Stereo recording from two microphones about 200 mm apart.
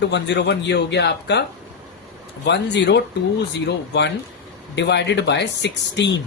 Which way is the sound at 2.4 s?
60° left (ahead or behind).